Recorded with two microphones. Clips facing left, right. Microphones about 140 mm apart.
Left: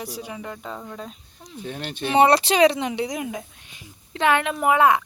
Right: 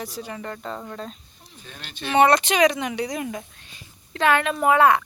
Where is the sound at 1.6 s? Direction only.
60° left (ahead or behind).